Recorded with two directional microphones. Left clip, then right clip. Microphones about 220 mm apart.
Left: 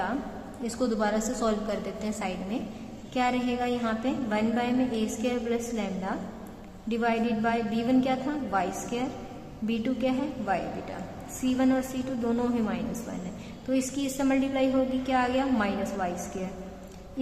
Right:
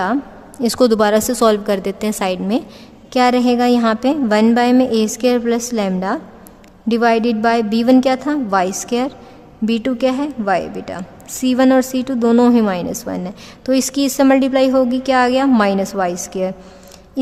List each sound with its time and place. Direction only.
0.6 s a woman's voice: 50° right (ahead or behind)